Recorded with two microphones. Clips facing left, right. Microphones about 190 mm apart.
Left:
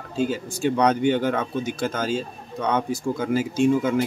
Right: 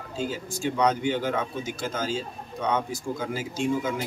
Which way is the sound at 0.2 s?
60° left (ahead or behind).